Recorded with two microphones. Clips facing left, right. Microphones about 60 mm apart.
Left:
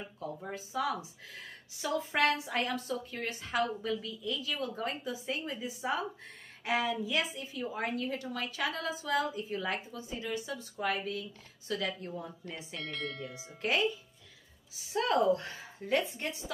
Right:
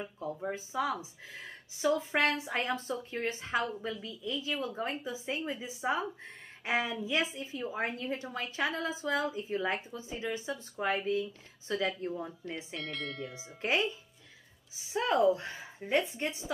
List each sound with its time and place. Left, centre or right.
0.0 s speech: centre
12.7 s speech: centre
13.6 s speech: right
14.9 s a woman's voice: centre